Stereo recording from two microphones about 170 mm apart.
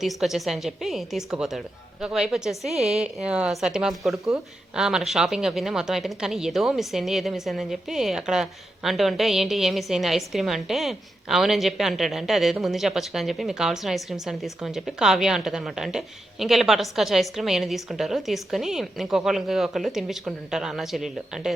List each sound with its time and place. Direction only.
0.0 s speech: centre (ahead or behind)